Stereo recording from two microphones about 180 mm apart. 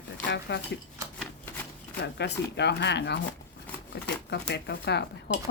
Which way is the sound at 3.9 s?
70° left (ahead or behind).